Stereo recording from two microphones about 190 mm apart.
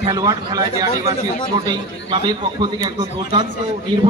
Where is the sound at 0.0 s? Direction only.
20° right (ahead or behind).